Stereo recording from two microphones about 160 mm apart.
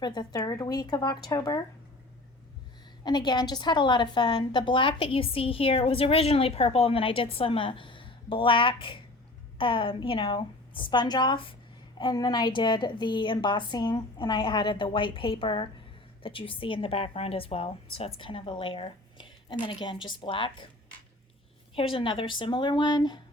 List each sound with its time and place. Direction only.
0.0 s a woman's voice: 25° left (ahead or behind)
3.0 s a woman's voice: 25° left (ahead or behind)
21.8 s a woman's voice: 35° left (ahead or behind)